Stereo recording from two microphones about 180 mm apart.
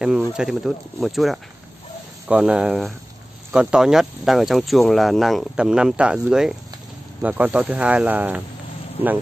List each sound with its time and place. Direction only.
0.0 s speech: 5° right (ahead or behind)